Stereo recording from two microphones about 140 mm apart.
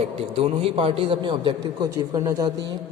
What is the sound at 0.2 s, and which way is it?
A woman's voice, 45° right (ahead or behind).